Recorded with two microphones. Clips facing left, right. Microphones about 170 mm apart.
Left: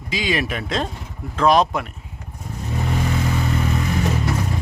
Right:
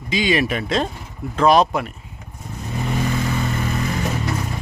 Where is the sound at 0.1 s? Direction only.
Centre (ahead or behind).